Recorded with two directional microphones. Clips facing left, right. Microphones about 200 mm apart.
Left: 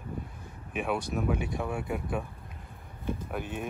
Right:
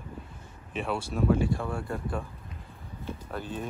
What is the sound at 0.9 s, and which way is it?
Speech, 15° left (ahead or behind).